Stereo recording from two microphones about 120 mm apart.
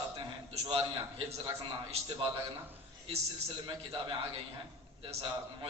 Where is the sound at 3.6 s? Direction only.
45° right (ahead or behind).